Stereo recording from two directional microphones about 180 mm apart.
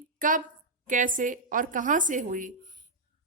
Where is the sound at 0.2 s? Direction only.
45° right (ahead or behind).